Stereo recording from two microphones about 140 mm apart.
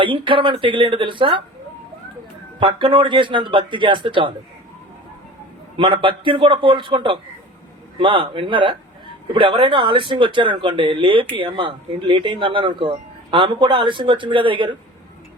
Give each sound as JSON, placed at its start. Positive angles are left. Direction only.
{"t": 0.0, "sound": "speech", "side_deg": -35}
{"t": 2.6, "sound": "speech", "side_deg": -40}
{"t": 5.7, "sound": "speech", "side_deg": -35}